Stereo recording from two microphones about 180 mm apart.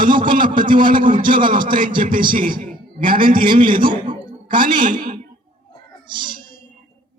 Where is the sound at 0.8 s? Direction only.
50° right (ahead or behind).